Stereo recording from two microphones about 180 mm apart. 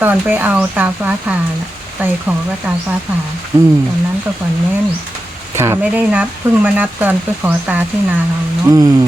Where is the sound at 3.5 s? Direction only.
15° right (ahead or behind).